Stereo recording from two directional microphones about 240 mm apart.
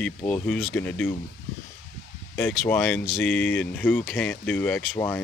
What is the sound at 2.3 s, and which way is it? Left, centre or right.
Speech, centre.